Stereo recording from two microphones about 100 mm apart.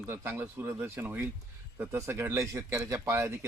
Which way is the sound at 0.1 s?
25° right (ahead or behind).